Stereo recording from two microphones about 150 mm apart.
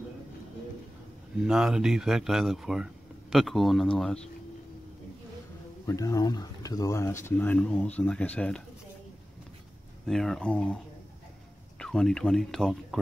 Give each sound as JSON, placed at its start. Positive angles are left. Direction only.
{"t": 1.4, "sound": "speech", "side_deg": -5}
{"t": 5.9, "sound": "speech", "side_deg": 20}
{"t": 10.0, "sound": "speech", "side_deg": 0}
{"t": 11.8, "sound": "speech", "side_deg": 5}